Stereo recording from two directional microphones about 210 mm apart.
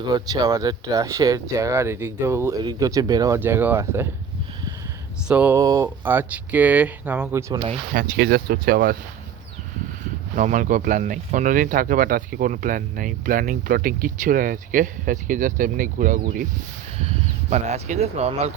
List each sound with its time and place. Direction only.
0.0 s speech: 20° right (ahead or behind)
5.3 s speech: 10° right (ahead or behind)
7.9 s speech: 50° right (ahead or behind)
10.3 s speech: 35° right (ahead or behind)
17.5 s speech: 35° right (ahead or behind)